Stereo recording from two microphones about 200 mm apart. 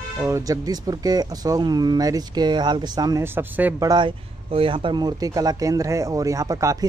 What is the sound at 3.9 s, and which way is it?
Speech, 25° right (ahead or behind).